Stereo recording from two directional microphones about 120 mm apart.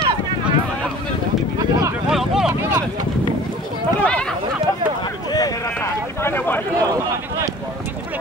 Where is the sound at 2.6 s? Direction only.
20° right (ahead or behind).